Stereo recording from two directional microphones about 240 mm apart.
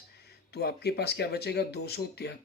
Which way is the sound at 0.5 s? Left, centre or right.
Left.